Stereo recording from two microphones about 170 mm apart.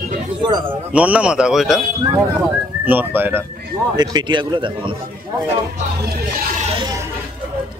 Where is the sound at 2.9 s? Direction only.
10° right (ahead or behind).